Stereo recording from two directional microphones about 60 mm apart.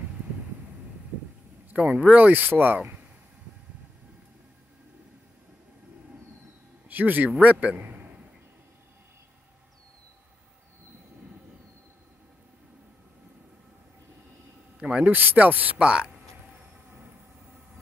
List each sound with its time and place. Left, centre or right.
1.7 s speech: right
6.9 s a man's voice: right
14.8 s a sound: centre
15.0 s speech: right
15.8 s speech: centre